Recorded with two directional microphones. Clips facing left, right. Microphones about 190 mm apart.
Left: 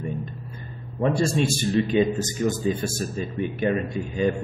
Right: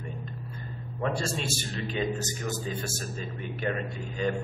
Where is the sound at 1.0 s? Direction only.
15° left (ahead or behind).